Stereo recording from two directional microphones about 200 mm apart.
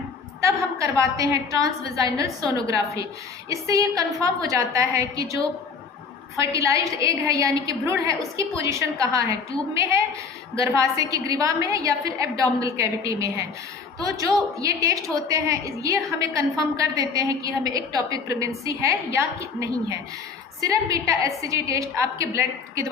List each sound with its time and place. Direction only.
0.4 s a woman's voice: 15° right (ahead or behind)
6.4 s a woman's voice: 15° right (ahead or behind)
10.5 s a woman's voice: 15° right (ahead or behind)